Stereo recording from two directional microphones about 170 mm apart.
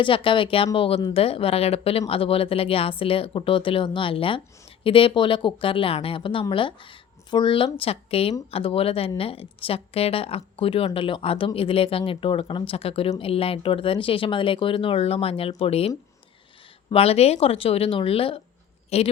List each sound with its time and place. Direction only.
0.0 s speech: 30° left (ahead or behind)
16.9 s speech: 35° left (ahead or behind)